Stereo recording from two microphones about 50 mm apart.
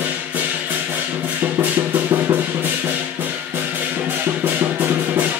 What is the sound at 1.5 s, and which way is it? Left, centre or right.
Music, right.